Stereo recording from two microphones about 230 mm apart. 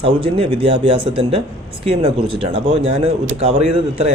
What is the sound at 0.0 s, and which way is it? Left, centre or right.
A man's voice, right.